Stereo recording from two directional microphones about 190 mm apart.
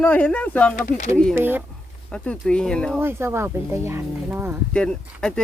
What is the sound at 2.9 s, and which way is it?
Speech, 10° right (ahead or behind).